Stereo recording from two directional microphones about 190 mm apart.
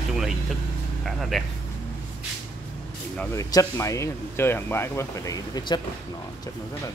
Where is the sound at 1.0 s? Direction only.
Centre (ahead or behind).